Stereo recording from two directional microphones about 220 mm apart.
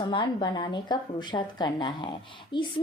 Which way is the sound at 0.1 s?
20° left (ahead or behind).